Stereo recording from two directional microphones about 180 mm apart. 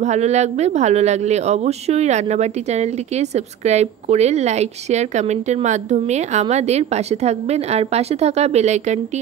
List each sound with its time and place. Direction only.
0.0 s speech: 40° right (ahead or behind)